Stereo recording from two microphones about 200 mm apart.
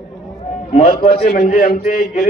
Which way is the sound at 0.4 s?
30° left (ahead or behind).